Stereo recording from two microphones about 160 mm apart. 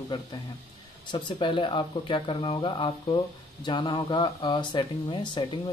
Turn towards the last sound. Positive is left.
turn(degrees=30)  # may be behind; listen again after turning